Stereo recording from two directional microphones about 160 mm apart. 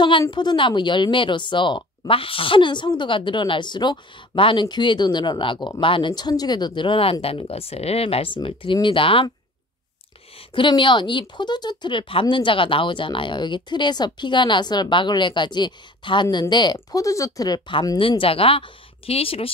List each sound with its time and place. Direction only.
0.3 s speech: 30° left (ahead or behind)
10.5 s speech: 30° left (ahead or behind)